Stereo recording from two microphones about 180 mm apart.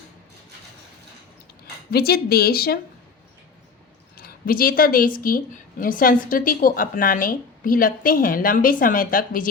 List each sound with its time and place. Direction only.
1.9 s speech: 60° left (ahead or behind)
4.2 s a woman's voice: 55° left (ahead or behind)